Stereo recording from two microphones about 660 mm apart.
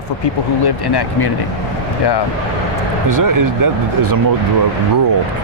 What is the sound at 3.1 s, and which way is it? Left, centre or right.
Speech, right.